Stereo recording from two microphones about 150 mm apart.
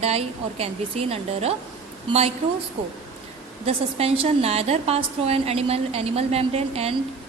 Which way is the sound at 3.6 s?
45° right (ahead or behind).